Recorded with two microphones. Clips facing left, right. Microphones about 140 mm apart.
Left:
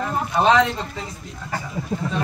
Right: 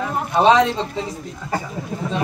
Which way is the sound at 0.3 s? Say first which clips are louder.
Right 3 dB; 20° right (ahead or behind).